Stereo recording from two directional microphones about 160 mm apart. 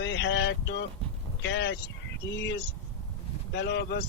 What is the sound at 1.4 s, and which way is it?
Speech, 90° left.